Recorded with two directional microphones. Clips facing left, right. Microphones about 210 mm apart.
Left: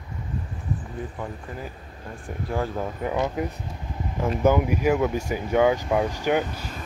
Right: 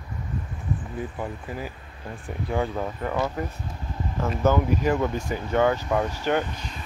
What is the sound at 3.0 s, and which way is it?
Speech, 15° left (ahead or behind).